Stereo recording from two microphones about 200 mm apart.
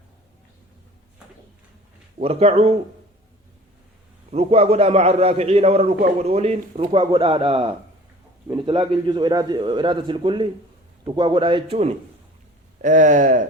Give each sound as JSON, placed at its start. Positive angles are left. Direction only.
{"t": 2.1, "sound": "a man's voice", "side_deg": -30}
{"t": 4.3, "sound": "a man's voice", "side_deg": -30}
{"t": 12.8, "sound": "a man's voice", "side_deg": -40}